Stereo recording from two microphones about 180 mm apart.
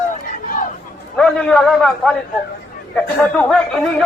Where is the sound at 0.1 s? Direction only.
45° left (ahead or behind).